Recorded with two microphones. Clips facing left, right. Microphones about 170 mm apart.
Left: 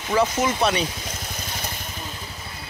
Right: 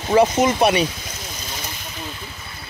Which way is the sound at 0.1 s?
20° right (ahead or behind).